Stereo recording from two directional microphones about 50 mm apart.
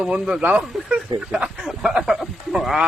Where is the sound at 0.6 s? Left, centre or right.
Centre.